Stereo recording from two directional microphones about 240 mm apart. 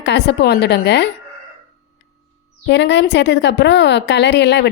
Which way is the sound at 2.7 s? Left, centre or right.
Left.